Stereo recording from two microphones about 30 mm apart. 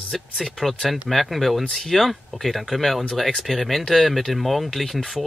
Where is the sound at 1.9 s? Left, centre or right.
Centre.